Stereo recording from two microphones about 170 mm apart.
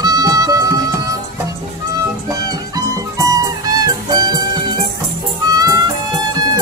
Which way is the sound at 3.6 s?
20° right (ahead or behind).